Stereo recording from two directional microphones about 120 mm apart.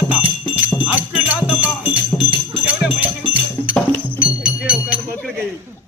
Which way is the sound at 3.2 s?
10° right (ahead or behind).